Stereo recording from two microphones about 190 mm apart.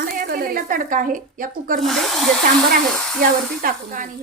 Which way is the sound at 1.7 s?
Centre (ahead or behind).